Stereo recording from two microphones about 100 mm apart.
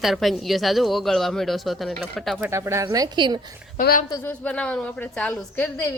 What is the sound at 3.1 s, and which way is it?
Speech, 50° right (ahead or behind).